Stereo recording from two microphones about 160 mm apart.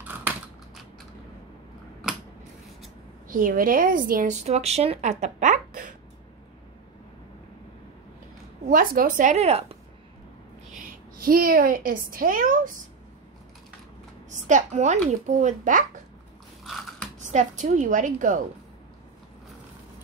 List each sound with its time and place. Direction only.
3.3 s speech: 60° right (ahead or behind)
8.6 s a woman's voice: 60° right (ahead or behind); by 9.8 s 40° right (ahead or behind)
10.7 s a woman's voice: 60° right (ahead or behind)
14.3 s a woman's voice: 50° right (ahead or behind)
16.6 s biting: centre (ahead or behind)
17.2 s a woman's voice: 50° right (ahead or behind)